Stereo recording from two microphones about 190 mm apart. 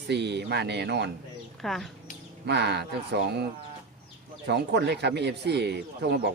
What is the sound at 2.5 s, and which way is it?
Speech, 60° right (ahead or behind).